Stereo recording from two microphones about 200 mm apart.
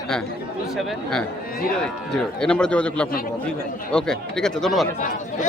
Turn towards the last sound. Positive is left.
turn(degrees=40)  # may be behind; listen again after turning